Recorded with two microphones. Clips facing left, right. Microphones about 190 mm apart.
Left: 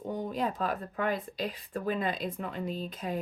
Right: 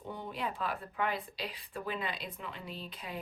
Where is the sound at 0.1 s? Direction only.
40° left (ahead or behind).